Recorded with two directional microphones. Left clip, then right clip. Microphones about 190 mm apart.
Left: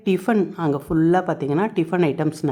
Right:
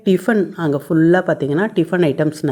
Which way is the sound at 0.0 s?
10° right (ahead or behind).